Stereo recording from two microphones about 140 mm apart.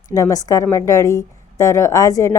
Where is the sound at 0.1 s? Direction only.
25° left (ahead or behind).